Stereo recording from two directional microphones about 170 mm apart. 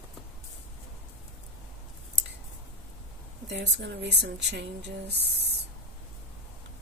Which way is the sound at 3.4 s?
90° right.